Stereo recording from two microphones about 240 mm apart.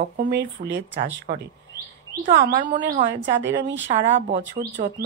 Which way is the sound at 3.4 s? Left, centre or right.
Right.